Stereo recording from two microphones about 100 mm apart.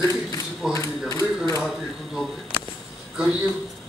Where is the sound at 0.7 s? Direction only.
35° left (ahead or behind).